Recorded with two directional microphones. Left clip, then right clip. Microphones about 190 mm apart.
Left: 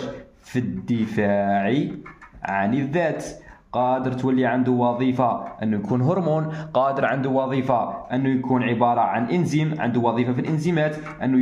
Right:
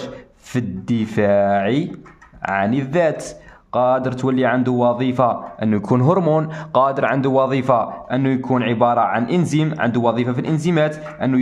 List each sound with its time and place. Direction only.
0.0 s a man's voice: 35° right (ahead or behind)